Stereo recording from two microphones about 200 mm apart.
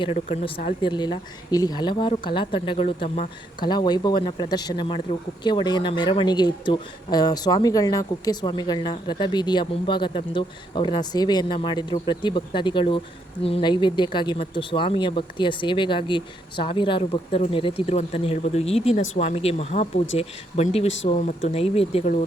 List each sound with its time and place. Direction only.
0.0 s speech: 25° left (ahead or behind)